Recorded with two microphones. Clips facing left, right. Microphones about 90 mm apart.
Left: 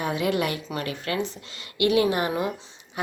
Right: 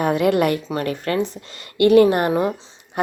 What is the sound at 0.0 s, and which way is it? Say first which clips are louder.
A woman's voice: right 8 dB; 55° right (ahead or behind).